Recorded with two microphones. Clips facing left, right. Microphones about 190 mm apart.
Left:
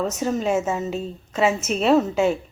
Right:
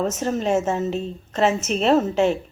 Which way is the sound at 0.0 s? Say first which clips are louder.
Even; centre (ahead or behind).